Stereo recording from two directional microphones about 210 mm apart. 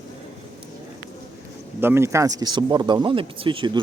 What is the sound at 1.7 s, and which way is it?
Speech, 10° right (ahead or behind).